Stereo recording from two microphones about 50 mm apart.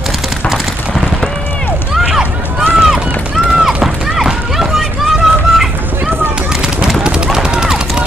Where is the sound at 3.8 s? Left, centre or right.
Centre.